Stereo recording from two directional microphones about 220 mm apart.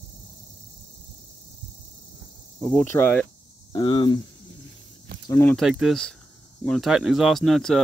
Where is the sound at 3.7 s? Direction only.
20° left (ahead or behind).